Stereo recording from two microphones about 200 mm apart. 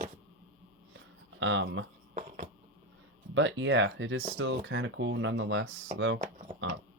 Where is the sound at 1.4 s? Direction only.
65° right (ahead or behind).